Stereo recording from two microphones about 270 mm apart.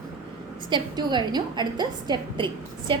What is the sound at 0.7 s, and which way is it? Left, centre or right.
A woman's voice, centre.